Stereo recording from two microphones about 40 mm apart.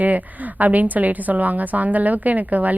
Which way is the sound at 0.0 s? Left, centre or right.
Right.